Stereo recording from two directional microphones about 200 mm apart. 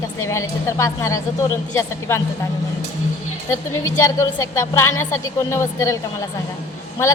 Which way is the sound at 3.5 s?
15° left (ahead or behind).